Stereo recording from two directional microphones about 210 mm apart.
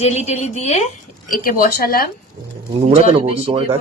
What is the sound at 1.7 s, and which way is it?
Speech, 45° left (ahead or behind).